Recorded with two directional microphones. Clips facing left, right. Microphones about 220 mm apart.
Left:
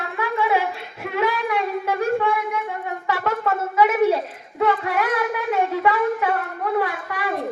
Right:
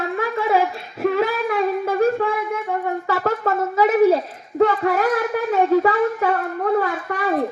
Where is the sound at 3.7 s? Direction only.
40° right (ahead or behind).